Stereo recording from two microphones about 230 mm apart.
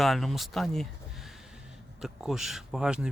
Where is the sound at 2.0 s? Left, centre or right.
Centre.